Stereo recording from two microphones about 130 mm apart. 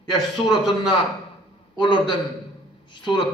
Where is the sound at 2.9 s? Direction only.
40° left (ahead or behind).